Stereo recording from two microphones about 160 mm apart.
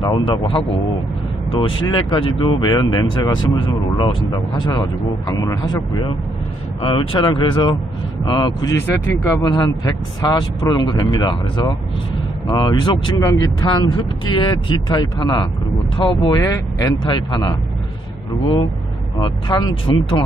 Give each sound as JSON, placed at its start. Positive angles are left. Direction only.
{"t": 0.0, "sound": "speech", "side_deg": 25}